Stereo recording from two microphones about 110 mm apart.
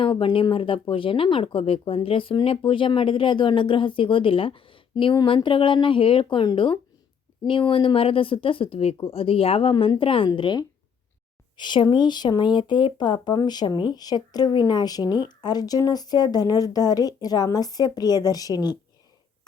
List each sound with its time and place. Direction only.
0.0 s speech: 50° left (ahead or behind)